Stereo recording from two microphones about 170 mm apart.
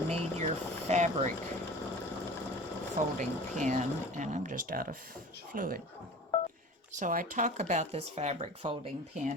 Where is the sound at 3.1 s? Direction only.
45° right (ahead or behind).